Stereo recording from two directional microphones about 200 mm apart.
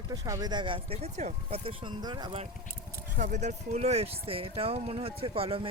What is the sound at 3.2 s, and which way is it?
Speech, 35° right (ahead or behind).